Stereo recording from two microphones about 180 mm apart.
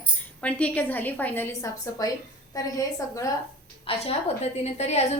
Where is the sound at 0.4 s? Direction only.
10° left (ahead or behind).